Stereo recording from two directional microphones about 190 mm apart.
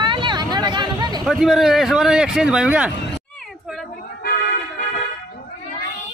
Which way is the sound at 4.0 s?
50° left (ahead or behind).